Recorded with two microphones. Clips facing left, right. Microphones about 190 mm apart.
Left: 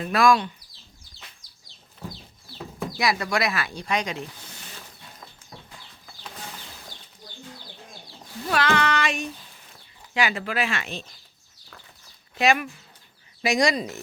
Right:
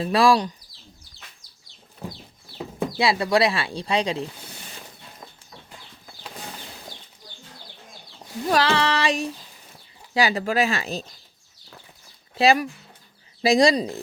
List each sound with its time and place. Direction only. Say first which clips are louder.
0.0 s speech: right 2 dB; 30° right (ahead or behind)
2.7 s speech: right 3 dB; 25° right (ahead or behind)
8.4 s speech: right 2 dB; 30° right (ahead or behind)
12.4 s speech: right 3 dB; 35° right (ahead or behind)